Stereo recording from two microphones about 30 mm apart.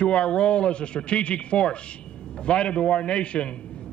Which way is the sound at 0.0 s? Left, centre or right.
Left.